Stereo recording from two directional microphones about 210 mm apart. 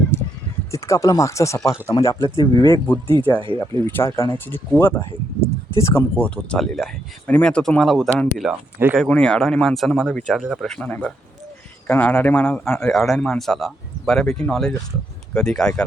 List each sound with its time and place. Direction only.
0.1 s a sound: 10° left (ahead or behind)
0.7 s speech: 15° left (ahead or behind)
3.3 s speech: 25° right (ahead or behind)
3.8 s speech: 10° left (ahead or behind)